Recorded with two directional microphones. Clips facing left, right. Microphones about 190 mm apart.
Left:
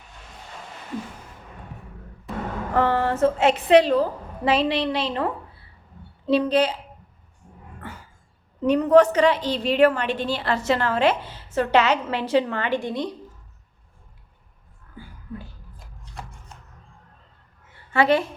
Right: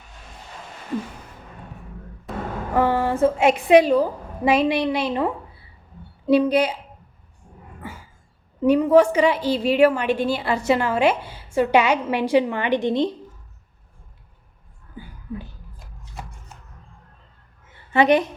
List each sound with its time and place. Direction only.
2.7 s a woman's voice: 10° right (ahead or behind)
8.6 s a woman's voice: 10° right (ahead or behind)
16.5 s a sound: 10° right (ahead or behind)
17.9 s a woman's voice: 20° right (ahead or behind)